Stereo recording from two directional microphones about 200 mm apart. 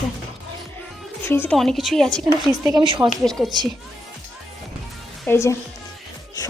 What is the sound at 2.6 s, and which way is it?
Speech, 20° right (ahead or behind).